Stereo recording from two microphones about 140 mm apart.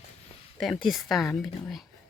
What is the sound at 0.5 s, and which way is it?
Speech, centre (ahead or behind).